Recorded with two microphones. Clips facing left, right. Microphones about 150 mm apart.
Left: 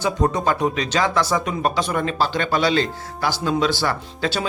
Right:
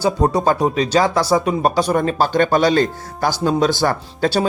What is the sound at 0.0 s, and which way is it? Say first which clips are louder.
Speech: right 4 dB; 35° right (ahead or behind).